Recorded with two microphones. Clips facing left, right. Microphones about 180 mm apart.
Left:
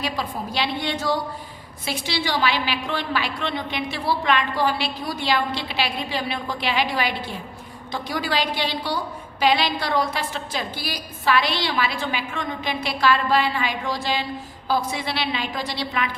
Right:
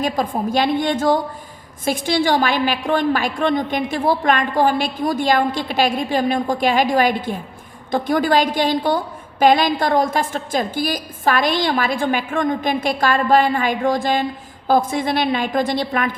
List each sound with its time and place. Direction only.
0.0 s a woman's voice: 45° right (ahead or behind)